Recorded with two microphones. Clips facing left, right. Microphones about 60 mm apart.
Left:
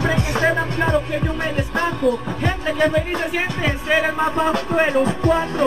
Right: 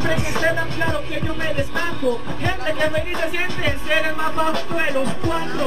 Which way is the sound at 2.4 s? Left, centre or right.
Centre.